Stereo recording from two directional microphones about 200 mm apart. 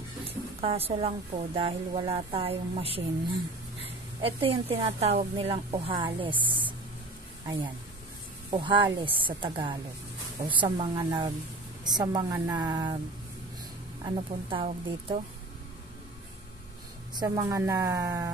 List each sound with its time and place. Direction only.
0.2 s a woman's voice: 30° right (ahead or behind)
8.5 s a woman's voice: 25° right (ahead or behind)
14.0 s a woman's voice: 25° right (ahead or behind)
17.1 s a woman's voice: 20° right (ahead or behind)